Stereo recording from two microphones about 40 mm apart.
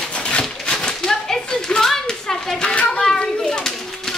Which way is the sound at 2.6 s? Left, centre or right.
Left.